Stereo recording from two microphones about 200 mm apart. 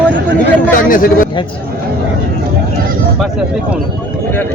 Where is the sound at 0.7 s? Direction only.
45° left (ahead or behind).